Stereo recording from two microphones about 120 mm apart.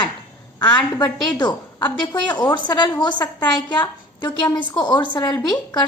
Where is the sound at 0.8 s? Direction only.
35° left (ahead or behind).